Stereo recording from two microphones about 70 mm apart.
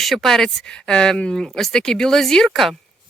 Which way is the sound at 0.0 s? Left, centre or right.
Centre.